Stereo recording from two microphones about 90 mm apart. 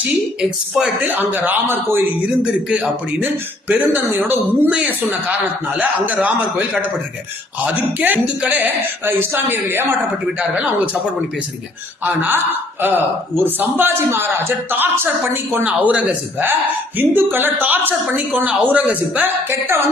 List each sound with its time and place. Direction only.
1.0 s speech: 20° right (ahead or behind)
2.2 s speech: 10° right (ahead or behind)
7.6 s speech: 20° right (ahead or behind)
12.0 s speech: 20° right (ahead or behind)
15.6 s speech: 15° right (ahead or behind)